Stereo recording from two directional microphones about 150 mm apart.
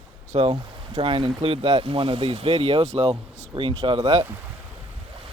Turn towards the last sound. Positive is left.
turn(degrees=-35)  # may be behind; listen again after turning